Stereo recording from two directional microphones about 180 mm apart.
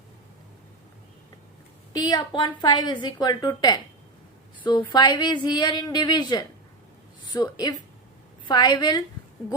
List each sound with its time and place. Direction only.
1.9 s a woman's voice: 20° left (ahead or behind)